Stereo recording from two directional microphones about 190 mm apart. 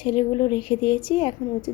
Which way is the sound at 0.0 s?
25° left (ahead or behind).